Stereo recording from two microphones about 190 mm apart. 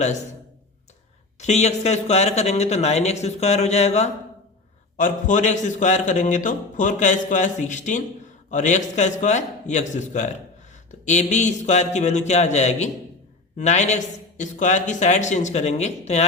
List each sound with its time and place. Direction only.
1.4 s a man's voice: 35° left (ahead or behind)